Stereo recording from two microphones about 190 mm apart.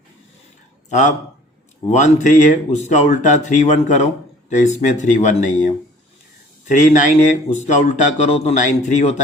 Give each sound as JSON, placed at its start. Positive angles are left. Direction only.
{"t": 0.9, "sound": "speech", "side_deg": 40}